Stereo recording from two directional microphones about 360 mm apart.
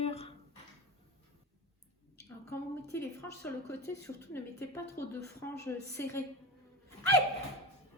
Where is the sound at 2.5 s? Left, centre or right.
Centre.